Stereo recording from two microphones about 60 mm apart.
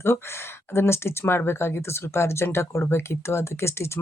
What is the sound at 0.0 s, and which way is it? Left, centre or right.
Speech, left.